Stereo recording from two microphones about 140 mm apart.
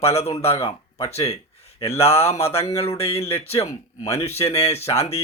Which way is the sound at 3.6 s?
20° left (ahead or behind).